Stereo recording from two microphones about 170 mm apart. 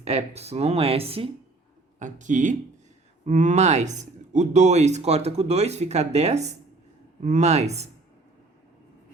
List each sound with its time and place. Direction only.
0.0 s speech: 40° right (ahead or behind)
2.0 s speech: 50° right (ahead or behind)